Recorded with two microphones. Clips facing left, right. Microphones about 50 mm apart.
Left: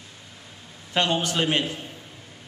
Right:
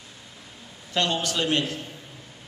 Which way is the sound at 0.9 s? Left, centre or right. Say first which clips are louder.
Left 2 dB; left.